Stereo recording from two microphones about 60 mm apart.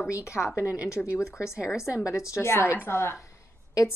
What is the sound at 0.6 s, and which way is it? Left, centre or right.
Speech, right.